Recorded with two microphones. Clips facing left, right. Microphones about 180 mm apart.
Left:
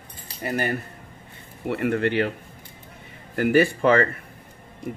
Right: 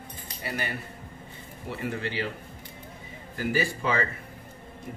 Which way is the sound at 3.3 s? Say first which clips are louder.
Left 9 dB; 60° left (ahead or behind).